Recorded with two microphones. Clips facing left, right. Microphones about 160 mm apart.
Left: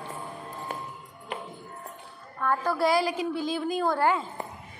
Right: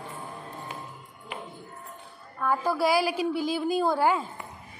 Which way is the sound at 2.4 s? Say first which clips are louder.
Even; 5° right (ahead or behind).